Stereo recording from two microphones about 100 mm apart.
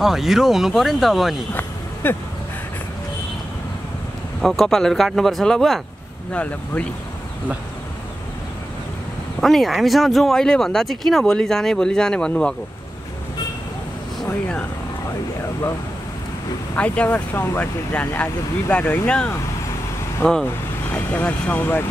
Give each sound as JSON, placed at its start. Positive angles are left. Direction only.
{"t": 0.0, "sound": "speech", "side_deg": -5}
{"t": 1.5, "sound": "a sound", "side_deg": 20}
{"t": 4.4, "sound": "speech", "side_deg": 5}
{"t": 9.4, "sound": "speech", "side_deg": 0}
{"t": 16.7, "sound": "speech", "side_deg": 15}